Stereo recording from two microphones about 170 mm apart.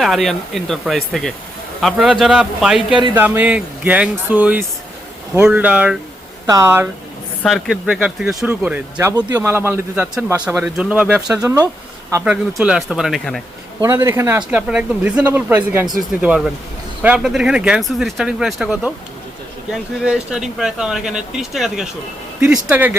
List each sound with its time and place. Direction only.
0.0 s speech: centre (ahead or behind)
7.4 s speech: centre (ahead or behind)
11.3 s speech: 20° right (ahead or behind)
12.1 s speech: 5° right (ahead or behind)
13.8 s speech: 15° right (ahead or behind)